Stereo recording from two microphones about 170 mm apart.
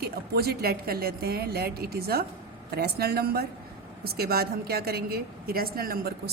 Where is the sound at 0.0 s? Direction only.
65° right (ahead or behind).